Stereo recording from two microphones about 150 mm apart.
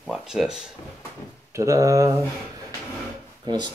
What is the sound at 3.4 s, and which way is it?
Speech, 30° right (ahead or behind).